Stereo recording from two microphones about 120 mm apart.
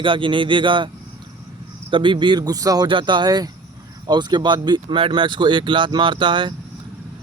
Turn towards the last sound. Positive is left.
turn(degrees=-40)  # may be behind; listen again after turning